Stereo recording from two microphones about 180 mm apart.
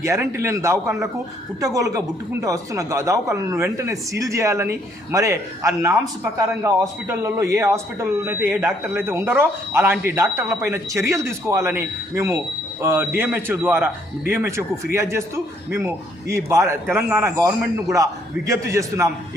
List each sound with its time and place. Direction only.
0.0 s speech: 15° right (ahead or behind)
16.3 s speech: 15° right (ahead or behind)